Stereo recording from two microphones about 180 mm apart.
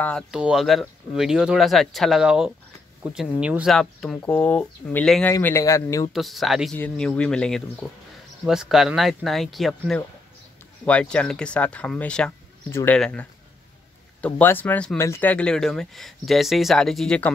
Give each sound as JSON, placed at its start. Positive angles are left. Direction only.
{"t": 0.0, "sound": "speech", "side_deg": 5}
{"t": 5.3, "sound": "speech", "side_deg": 15}
{"t": 6.1, "sound": "speech", "side_deg": 0}